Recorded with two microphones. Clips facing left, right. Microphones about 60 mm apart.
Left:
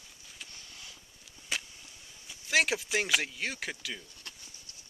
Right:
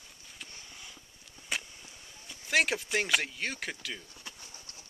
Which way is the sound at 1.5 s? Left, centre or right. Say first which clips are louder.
Right 1 dB; centre.